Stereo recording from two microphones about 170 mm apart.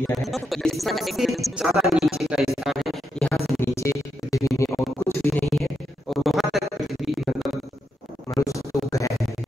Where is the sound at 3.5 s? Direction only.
15° left (ahead or behind).